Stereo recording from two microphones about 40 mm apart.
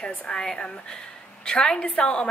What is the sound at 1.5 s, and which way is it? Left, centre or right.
Speech, left.